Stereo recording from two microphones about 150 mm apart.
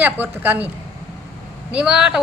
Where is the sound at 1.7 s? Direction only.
5° right (ahead or behind).